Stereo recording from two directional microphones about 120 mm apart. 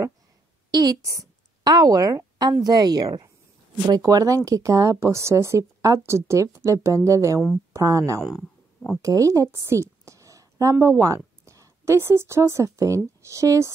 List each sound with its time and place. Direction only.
0.7 s a woman's voice: 30° right (ahead or behind)
8.3 s a sound: centre (ahead or behind)
9.0 s a woman's voice: 25° right (ahead or behind)